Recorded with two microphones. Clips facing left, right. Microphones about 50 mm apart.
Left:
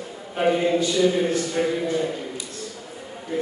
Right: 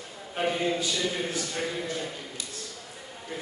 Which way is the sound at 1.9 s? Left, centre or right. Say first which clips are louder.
Left 9 dB; centre.